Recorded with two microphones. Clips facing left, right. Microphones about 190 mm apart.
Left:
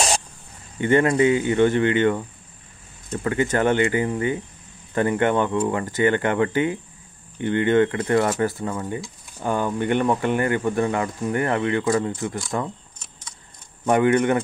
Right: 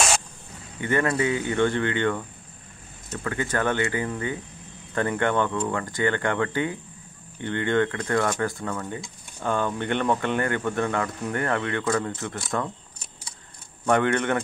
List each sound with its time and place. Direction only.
0.7 s speech: 25° left (ahead or behind)
1.2 s speech: 15° left (ahead or behind)
13.8 s speech: 10° left (ahead or behind)